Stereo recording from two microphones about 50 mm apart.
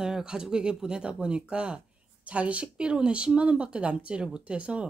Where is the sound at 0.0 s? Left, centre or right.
Centre.